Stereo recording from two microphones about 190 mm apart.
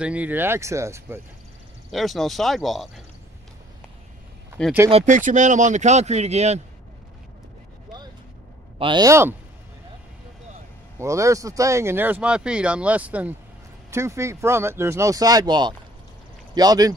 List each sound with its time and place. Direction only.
0.0 s speech: 5° right (ahead or behind)
1.9 s speech: centre (ahead or behind)
4.6 s speech: 5° left (ahead or behind)
4.9 s speech: 40° right (ahead or behind)
8.7 s speech: 25° right (ahead or behind)
11.0 s speech: 15° right (ahead or behind)